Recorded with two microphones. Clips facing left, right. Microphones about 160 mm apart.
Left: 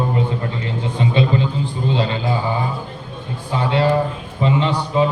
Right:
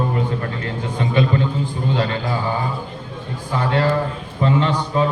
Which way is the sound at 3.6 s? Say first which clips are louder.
Left 2 dB; 20° left (ahead or behind).